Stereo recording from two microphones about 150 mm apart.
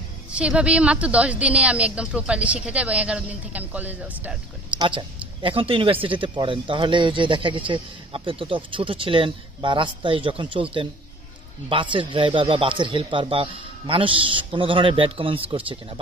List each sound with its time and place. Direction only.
0.3 s a woman's voice: 5° right (ahead or behind)
4.7 s speech: 35° right (ahead or behind)